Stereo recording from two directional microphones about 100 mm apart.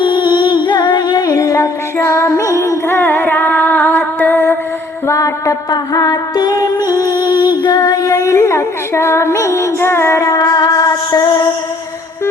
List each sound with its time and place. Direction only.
0.0 s music: 50° left (ahead or behind); by 4.5 s 20° left (ahead or behind)
5.0 s music: 35° left (ahead or behind)